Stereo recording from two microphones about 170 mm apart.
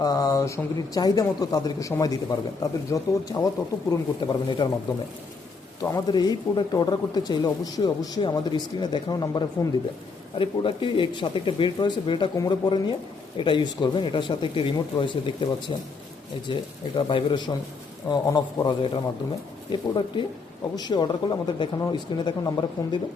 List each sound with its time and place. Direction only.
0.0 s speech: 20° left (ahead or behind)
5.8 s speech: 20° left (ahead or behind)